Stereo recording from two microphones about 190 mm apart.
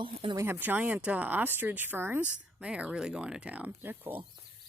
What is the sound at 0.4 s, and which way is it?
Speech, 10° right (ahead or behind).